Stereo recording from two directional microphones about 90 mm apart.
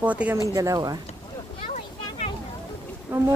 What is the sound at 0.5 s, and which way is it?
Speech, 40° right (ahead or behind).